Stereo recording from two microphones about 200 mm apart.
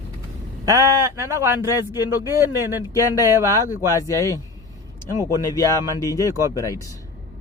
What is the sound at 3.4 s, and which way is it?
Speech, 15° right (ahead or behind).